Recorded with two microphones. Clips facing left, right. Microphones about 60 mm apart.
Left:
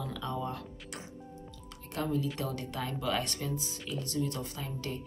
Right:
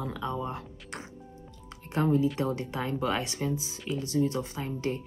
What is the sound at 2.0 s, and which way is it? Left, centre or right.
Speech, right.